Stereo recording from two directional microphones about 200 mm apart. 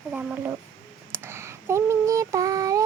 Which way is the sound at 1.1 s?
10° right (ahead or behind).